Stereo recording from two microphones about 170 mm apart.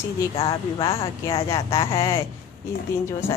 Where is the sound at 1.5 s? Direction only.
20° left (ahead or behind).